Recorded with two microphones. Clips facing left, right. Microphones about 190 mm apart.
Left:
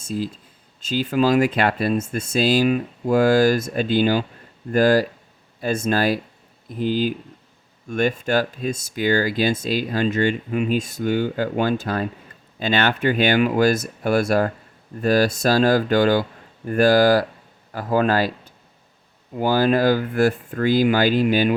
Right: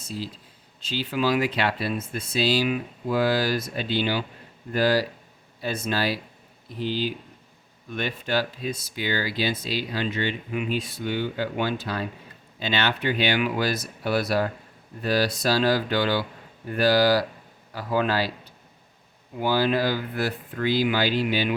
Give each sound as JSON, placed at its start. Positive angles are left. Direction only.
{"t": 0.0, "sound": "speech", "side_deg": 50}